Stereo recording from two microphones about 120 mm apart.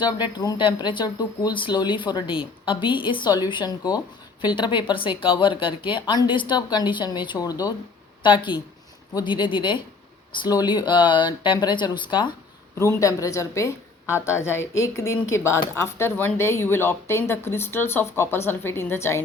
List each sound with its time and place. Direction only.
0.0 s a woman's voice: 35° left (ahead or behind)
8.2 s a woman's voice: 40° left (ahead or behind)
12.8 s a woman's voice: 25° left (ahead or behind)